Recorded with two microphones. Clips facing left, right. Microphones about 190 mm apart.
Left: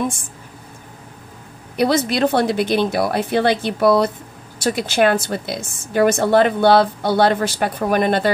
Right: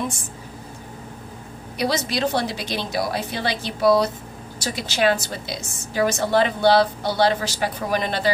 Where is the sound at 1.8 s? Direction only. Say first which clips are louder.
Left 6 dB; 55° left (ahead or behind).